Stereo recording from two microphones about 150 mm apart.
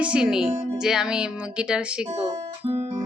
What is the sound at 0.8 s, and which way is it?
Music, 5° right (ahead or behind).